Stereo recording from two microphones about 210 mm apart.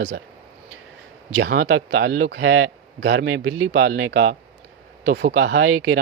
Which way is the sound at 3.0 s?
65° right (ahead or behind).